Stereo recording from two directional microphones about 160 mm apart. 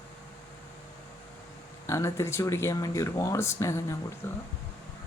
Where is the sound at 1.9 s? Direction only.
20° left (ahead or behind).